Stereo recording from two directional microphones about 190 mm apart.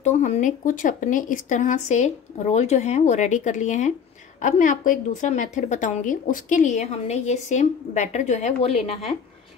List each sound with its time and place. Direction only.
0.0 s a woman's voice: 40° left (ahead or behind)